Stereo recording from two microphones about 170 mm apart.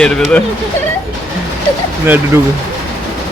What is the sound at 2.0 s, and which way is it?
Speech, 10° right (ahead or behind).